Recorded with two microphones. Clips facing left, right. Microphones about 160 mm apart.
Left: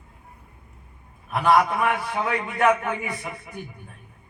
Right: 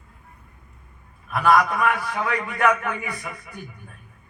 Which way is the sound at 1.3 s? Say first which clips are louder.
Even; 25° left (ahead or behind).